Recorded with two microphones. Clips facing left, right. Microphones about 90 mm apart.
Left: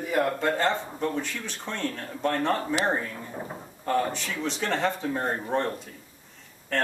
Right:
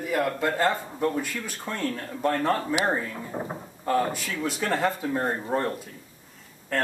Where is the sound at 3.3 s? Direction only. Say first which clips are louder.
Right 4 dB; 25° right (ahead or behind).